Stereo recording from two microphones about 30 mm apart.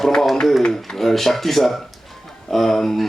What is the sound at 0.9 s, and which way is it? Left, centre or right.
Speech, centre.